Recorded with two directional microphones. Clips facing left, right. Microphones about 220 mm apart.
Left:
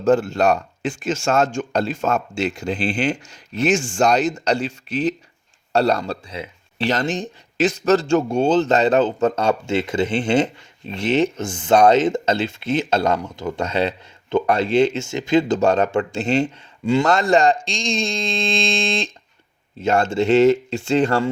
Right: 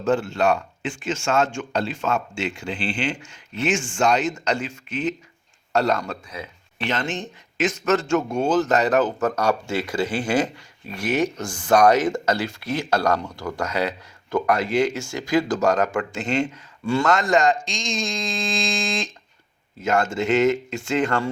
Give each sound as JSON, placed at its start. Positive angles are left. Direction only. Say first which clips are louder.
{"t": 0.0, "sound": "speech", "louder": "left 4 dB", "side_deg": 40}
{"t": 16.8, "sound": "a man's voice", "louder": "left 4 dB", "side_deg": 15}
{"t": 17.1, "sound": "speech", "louder": "left 2 dB", "side_deg": 30}